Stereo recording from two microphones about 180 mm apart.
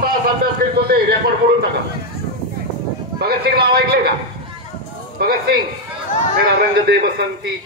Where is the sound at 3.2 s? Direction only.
60° right (ahead or behind).